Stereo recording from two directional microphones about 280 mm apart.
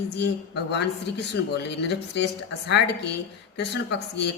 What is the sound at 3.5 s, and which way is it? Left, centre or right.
Speech, left.